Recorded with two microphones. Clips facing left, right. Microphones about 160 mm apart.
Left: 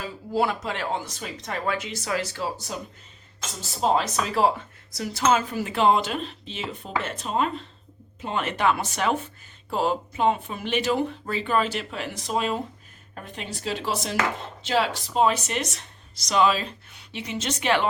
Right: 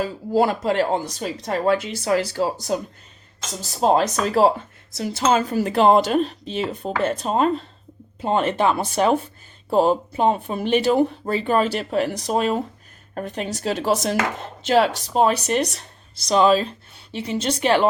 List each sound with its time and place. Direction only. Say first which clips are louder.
0.0 s speech: right 6 dB; 40° right (ahead or behind)
3.8 s speech: right 5 dB; 40° right (ahead or behind)
4.9 s speech: right 3 dB; 25° right (ahead or behind)